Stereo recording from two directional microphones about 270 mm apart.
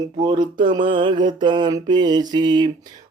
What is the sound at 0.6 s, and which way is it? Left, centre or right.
Mantra, centre.